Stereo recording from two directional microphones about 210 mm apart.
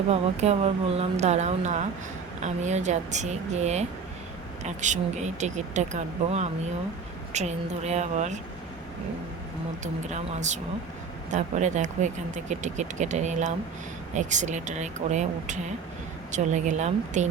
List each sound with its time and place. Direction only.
0.1 s speech: 30° right (ahead or behind)
9.8 s speech: 35° right (ahead or behind)